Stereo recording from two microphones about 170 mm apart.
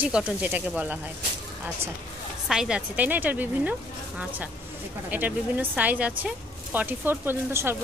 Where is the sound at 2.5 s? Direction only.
5° right (ahead or behind).